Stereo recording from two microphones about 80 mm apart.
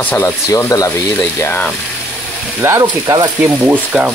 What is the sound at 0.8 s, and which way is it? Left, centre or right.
Speech, left.